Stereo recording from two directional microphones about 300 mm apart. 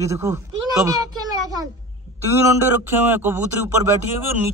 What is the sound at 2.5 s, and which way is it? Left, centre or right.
Speech, centre.